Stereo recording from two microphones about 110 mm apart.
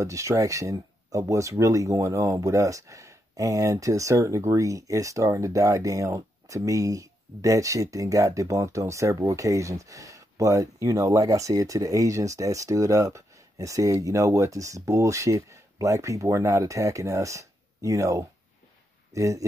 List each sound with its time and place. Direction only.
0.0 s speech: 30° right (ahead or behind)